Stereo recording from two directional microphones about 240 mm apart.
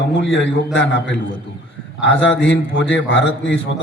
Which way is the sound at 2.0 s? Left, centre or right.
Left.